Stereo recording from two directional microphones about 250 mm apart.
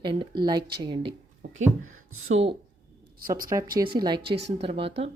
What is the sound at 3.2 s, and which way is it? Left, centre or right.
Speech, right.